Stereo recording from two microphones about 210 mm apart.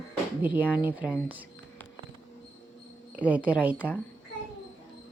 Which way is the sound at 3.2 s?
5° right (ahead or behind).